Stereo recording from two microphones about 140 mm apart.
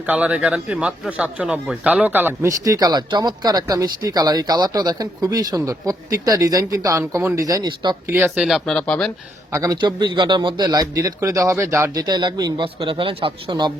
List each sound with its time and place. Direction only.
0.0 s a man's voice: 10° right (ahead or behind)
2.6 s speech: 25° right (ahead or behind)
8.0 s a man's voice: 15° right (ahead or behind)
8.4 s speech: centre (ahead or behind)
9.5 s speech: 20° right (ahead or behind)
9.8 s a man's voice: 35° right (ahead or behind)